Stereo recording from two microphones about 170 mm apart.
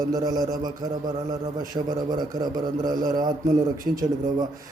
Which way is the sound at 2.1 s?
25° right (ahead or behind).